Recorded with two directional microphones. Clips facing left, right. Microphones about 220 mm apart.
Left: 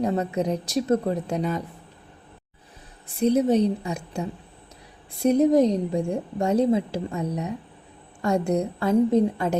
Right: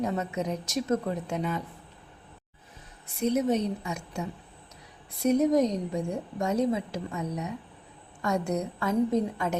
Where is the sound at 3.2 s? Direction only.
30° left (ahead or behind).